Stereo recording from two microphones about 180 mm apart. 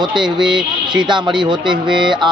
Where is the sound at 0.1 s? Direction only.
5° right (ahead or behind).